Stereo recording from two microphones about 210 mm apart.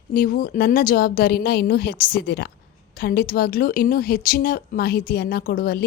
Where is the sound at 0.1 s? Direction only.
45° left (ahead or behind).